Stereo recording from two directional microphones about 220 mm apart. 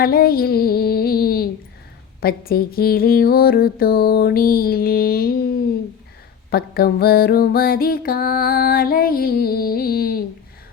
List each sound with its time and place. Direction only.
0.0 s music: 40° left (ahead or behind)